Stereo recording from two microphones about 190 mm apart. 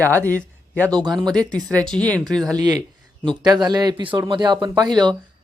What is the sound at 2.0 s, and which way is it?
Speech, 5° left (ahead or behind).